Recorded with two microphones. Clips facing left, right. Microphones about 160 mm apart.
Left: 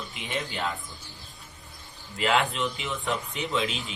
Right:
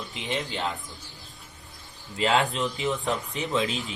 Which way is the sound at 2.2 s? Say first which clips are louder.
Right 1 dB; 30° right (ahead or behind).